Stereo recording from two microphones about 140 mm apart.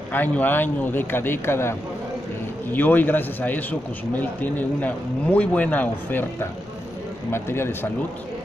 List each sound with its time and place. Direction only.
0.1 s speech: 15° left (ahead or behind)
7.2 s speech: 15° left (ahead or behind)